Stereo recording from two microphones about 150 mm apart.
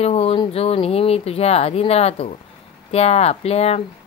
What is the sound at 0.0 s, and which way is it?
Speech, 40° left (ahead or behind).